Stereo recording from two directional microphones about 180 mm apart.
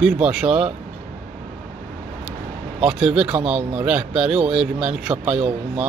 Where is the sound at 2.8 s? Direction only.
5° right (ahead or behind).